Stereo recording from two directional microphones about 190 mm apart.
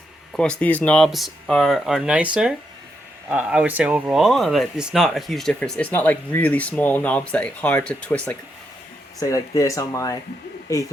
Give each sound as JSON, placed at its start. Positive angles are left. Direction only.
{"t": 0.3, "sound": "speech", "side_deg": 5}
{"t": 9.2, "sound": "speech", "side_deg": 15}